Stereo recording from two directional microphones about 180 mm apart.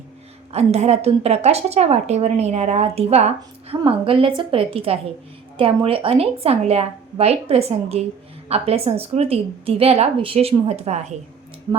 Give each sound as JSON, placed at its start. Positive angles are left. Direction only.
{"t": 0.5, "sound": "a woman's voice", "side_deg": -35}